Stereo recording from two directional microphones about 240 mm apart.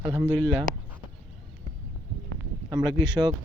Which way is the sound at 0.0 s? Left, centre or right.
Centre.